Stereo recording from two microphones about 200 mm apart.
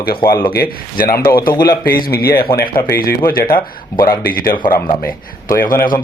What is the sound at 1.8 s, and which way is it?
Speech, 45° left (ahead or behind).